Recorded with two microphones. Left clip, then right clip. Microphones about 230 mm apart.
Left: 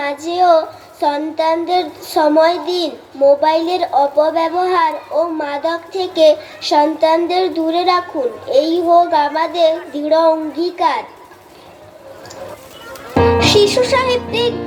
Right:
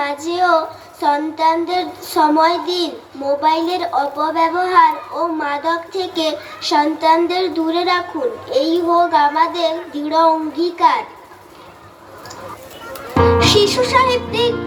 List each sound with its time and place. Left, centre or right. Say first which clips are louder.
0.0 s child singing: left 2 dB; left
12.9 s music: left 1 dB; left